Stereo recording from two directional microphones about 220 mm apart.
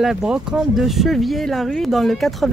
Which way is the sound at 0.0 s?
Centre (ahead or behind).